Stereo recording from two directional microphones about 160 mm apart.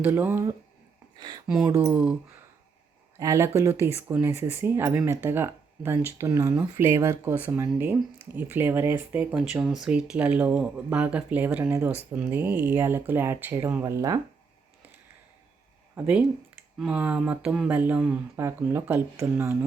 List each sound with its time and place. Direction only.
0.0 s speech: 15° right (ahead or behind)
1.5 s speech: 5° right (ahead or behind)
3.2 s speech: 20° right (ahead or behind)
16.0 s speech: 10° right (ahead or behind)